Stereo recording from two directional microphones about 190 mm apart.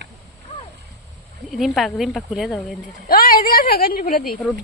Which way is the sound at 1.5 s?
Centre (ahead or behind).